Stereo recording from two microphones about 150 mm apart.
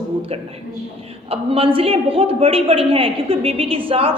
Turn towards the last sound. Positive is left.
turn(degrees=-40)  # may be behind; listen again after turning